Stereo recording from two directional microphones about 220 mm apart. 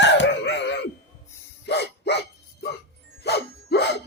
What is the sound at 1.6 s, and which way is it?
Dog, 50° left (ahead or behind).